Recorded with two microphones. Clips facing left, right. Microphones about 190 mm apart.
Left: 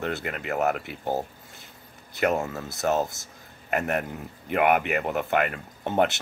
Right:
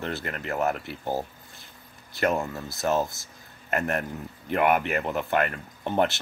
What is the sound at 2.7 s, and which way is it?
Speech, 20° left (ahead or behind).